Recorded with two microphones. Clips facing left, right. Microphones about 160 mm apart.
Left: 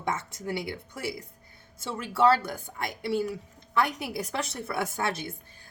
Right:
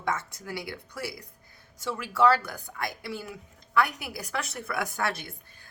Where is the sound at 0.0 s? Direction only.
20° left (ahead or behind).